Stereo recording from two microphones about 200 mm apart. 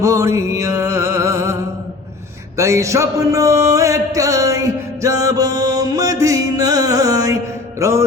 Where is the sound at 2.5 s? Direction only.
15° right (ahead or behind).